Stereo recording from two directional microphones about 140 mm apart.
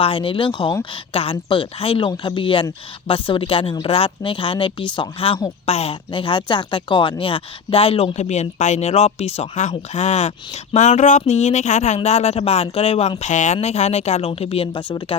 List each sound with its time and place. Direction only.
0.0 s speech: 40° left (ahead or behind)